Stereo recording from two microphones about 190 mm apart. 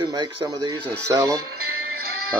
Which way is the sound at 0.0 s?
20° right (ahead or behind).